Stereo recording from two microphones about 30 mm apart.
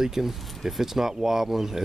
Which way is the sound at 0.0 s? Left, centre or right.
Centre.